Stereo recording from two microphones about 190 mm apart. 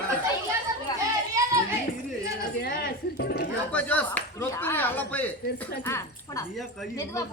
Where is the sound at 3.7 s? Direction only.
5° left (ahead or behind).